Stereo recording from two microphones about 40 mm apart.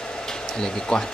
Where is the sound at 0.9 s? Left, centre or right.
Left.